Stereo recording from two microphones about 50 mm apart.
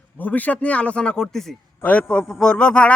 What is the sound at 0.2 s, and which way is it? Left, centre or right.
A man's voice, left.